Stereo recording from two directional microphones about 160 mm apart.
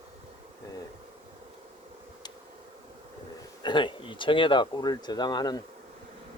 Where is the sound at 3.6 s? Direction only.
30° left (ahead or behind).